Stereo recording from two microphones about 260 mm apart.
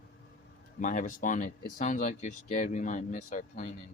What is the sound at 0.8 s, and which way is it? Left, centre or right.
Speech, left.